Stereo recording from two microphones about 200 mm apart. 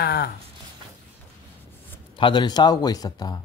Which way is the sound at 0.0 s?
50° left (ahead or behind).